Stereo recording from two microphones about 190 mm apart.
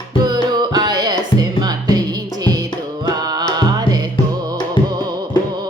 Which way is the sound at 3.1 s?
20° right (ahead or behind).